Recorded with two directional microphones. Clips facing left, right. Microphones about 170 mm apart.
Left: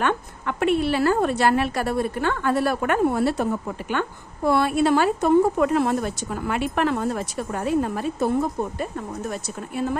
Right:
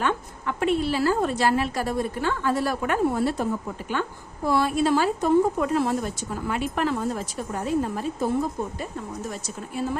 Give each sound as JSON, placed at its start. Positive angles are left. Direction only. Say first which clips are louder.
{"t": 0.0, "sound": "speech", "louder": "left 2 dB", "side_deg": 60}